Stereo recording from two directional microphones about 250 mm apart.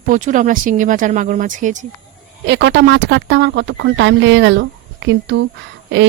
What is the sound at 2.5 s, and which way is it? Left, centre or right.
Speech, right.